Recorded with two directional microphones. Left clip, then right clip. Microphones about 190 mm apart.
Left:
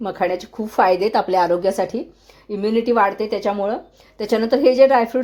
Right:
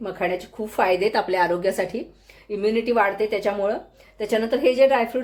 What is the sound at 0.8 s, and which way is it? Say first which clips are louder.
A woman's voice: left 4 dB; 25° left (ahead or behind).